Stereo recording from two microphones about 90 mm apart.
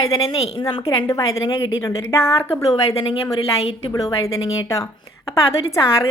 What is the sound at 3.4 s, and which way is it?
Speech, 90° left.